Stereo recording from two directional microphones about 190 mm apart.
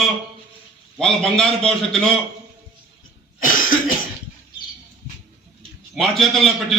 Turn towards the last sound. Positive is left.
turn(degrees=0)  # may be behind; listen again after turning